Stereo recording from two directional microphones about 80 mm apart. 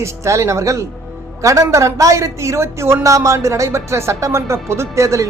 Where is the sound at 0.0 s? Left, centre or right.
Right.